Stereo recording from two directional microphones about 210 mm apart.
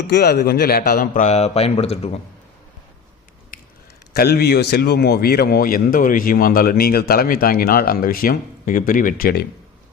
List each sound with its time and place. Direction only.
0.1 s a man's voice: 50° left (ahead or behind); by 2.2 s 30° left (ahead or behind)
3.5 s a sound: 40° left (ahead or behind)
4.1 s a man's voice: 50° left (ahead or behind)